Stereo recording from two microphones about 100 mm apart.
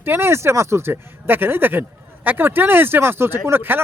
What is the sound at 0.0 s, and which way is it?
A man's voice, 20° right (ahead or behind).